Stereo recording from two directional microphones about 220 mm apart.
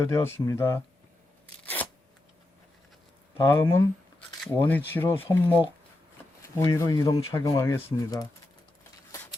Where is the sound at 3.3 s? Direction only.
15° left (ahead or behind).